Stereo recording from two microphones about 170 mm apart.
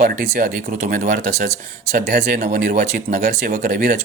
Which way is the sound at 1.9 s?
65° right (ahead or behind).